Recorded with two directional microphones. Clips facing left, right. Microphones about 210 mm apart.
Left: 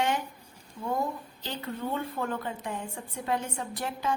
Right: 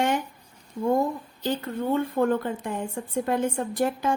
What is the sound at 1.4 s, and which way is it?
A woman's voice, 50° right (ahead or behind).